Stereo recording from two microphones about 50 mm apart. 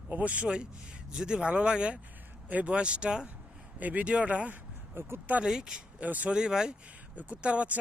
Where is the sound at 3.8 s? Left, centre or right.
Right.